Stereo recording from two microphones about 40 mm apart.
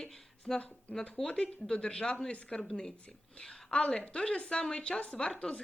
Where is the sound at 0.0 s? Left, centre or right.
Centre.